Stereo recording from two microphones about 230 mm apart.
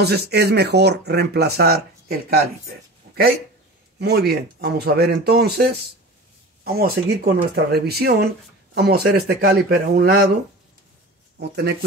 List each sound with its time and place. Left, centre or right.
0.0 s speech: right
4.0 s speech: right
11.3 s speech: right